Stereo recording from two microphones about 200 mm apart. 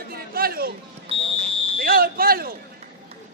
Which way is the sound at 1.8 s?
50° right (ahead or behind).